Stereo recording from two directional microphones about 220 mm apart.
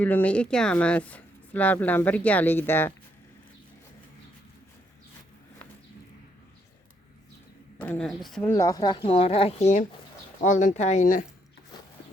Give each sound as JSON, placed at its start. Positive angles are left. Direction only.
{"t": 0.0, "sound": "speech", "side_deg": 5}
{"t": 7.8, "sound": "speech", "side_deg": 5}